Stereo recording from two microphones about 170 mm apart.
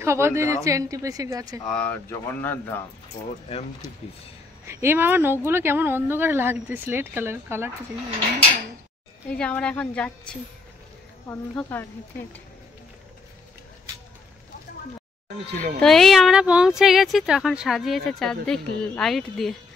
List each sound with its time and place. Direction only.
0.0 s a woman's voice: 15° right (ahead or behind)
1.7 s speech: 10° left (ahead or behind)
4.8 s speech: 10° right (ahead or behind)
9.3 s speech: 5° left (ahead or behind)
15.8 s speech: centre (ahead or behind)